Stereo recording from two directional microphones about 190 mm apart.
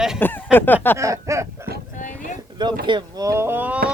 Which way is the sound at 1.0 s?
15° right (ahead or behind).